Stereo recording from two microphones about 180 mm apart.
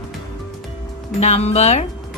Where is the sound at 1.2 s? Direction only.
35° left (ahead or behind).